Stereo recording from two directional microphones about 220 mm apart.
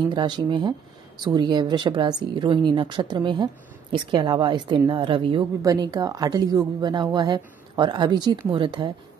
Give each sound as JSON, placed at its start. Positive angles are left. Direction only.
{"t": 0.1, "sound": "a woman's voice", "side_deg": -20}